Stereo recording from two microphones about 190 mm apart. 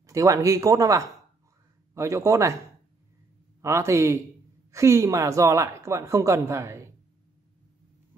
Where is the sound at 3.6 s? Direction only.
15° right (ahead or behind).